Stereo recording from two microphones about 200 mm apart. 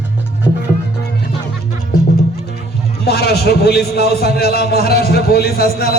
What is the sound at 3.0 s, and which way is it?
A man's voice, 55° left (ahead or behind).